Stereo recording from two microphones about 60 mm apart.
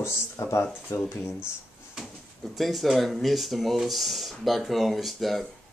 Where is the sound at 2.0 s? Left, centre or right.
Centre.